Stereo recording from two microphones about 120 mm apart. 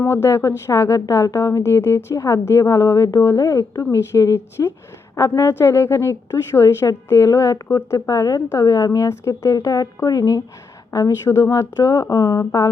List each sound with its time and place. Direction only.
0.0 s a woman's voice: 20° left (ahead or behind)